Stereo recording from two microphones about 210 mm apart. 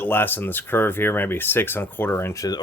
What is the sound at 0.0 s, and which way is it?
Speech, 10° left (ahead or behind).